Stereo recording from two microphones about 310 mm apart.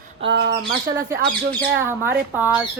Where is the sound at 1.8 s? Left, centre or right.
Centre.